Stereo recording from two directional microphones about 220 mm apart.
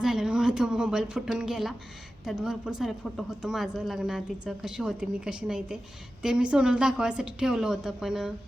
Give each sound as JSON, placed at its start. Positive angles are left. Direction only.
{"t": 0.0, "sound": "speech", "side_deg": 0}